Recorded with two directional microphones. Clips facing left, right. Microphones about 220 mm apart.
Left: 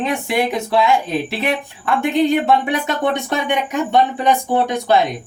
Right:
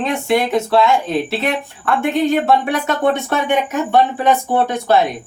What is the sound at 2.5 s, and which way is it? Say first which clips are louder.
Speech: right 1 dB; 20° left (ahead or behind).